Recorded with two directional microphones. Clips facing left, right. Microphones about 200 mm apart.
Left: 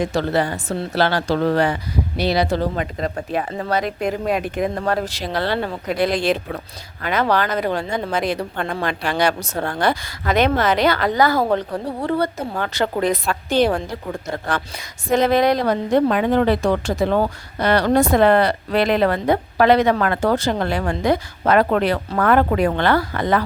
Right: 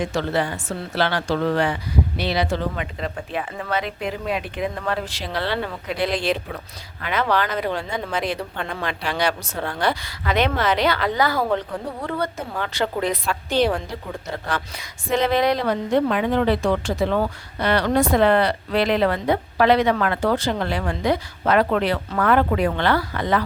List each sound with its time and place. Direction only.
0.0 s a woman's voice: 35° left (ahead or behind)
12.5 s a woman's voice: 45° left (ahead or behind)